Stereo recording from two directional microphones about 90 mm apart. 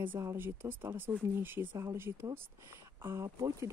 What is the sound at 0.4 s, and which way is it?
Speech, 25° right (ahead or behind).